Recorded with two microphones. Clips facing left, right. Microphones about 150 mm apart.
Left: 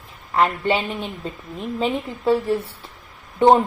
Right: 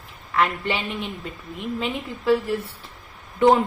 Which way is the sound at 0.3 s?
30° left (ahead or behind).